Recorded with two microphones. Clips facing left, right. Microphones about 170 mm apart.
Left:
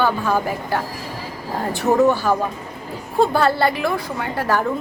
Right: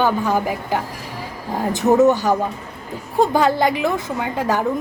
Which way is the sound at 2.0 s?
20° right (ahead or behind).